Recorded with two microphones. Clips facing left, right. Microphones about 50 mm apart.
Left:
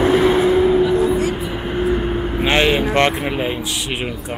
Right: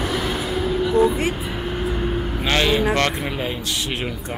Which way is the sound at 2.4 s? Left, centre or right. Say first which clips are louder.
Left 3 dB; left.